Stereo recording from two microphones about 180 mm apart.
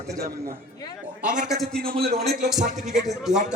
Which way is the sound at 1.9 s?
60° right (ahead or behind).